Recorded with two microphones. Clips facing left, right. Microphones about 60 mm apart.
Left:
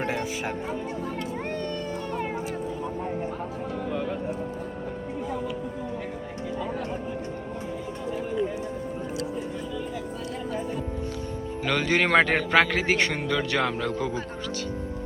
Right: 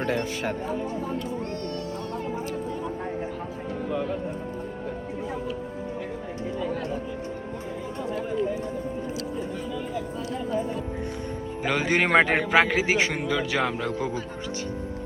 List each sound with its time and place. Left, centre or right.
0.0 s speech: centre
11.6 s a man's voice: centre
13.8 s speech: right